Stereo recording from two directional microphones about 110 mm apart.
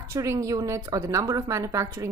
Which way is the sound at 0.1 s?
30° right (ahead or behind).